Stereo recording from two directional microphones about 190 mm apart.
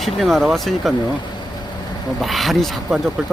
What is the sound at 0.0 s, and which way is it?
Speech, centre (ahead or behind).